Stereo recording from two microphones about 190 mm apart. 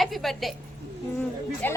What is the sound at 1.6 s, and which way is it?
Speech, 10° left (ahead or behind).